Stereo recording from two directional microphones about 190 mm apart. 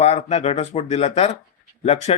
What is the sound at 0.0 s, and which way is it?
Speech, 35° left (ahead or behind).